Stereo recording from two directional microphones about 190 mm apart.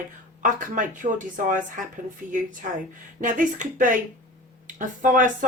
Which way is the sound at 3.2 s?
45° right (ahead or behind).